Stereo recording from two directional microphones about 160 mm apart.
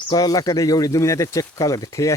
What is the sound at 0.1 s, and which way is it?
Speech, 25° left (ahead or behind).